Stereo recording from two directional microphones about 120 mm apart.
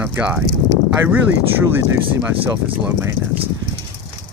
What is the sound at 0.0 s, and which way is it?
Speech, 15° right (ahead or behind).